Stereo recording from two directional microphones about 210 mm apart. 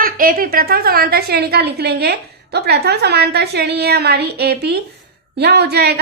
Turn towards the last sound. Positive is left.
turn(degrees=-50)  # may be behind; listen again after turning